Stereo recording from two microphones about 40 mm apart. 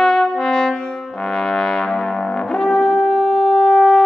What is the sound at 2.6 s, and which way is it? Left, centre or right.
Brass instrument, centre.